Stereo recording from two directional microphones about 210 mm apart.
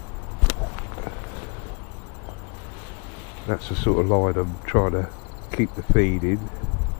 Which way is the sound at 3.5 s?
25° left (ahead or behind).